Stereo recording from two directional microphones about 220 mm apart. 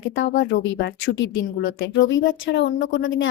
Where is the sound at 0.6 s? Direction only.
55° left (ahead or behind).